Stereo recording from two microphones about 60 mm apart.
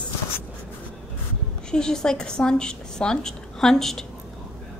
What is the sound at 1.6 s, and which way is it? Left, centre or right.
A woman's voice, centre.